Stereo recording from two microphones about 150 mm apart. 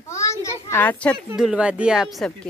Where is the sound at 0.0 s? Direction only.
20° left (ahead or behind).